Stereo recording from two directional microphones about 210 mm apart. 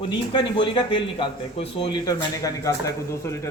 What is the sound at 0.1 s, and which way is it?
Speech, 20° left (ahead or behind).